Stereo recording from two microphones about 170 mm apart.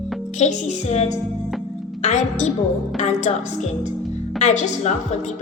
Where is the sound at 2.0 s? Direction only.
40° left (ahead or behind).